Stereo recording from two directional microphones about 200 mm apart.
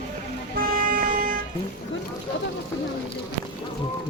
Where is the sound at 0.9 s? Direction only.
45° right (ahead or behind).